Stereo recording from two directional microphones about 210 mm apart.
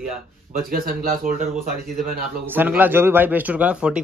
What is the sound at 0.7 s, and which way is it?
Speech, 40° right (ahead or behind).